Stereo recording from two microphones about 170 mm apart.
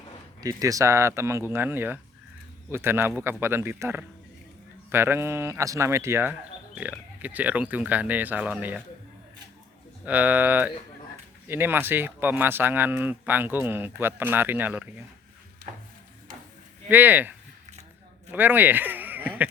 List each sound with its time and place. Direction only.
0.4 s speech: 20° right (ahead or behind)
10.1 s speech: 10° right (ahead or behind)
16.9 s speech: 10° right (ahead or behind)